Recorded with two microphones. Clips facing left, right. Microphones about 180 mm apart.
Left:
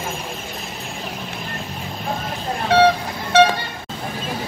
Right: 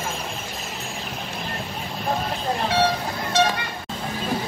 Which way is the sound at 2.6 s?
60° left (ahead or behind).